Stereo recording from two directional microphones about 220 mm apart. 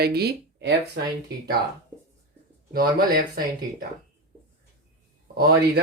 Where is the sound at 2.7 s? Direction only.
40° right (ahead or behind).